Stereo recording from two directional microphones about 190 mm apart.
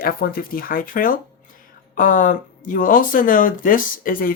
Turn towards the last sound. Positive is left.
turn(degrees=50)  # may be behind; listen again after turning